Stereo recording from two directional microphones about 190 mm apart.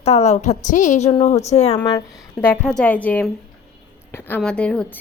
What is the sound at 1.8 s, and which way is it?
Speech, 20° left (ahead or behind).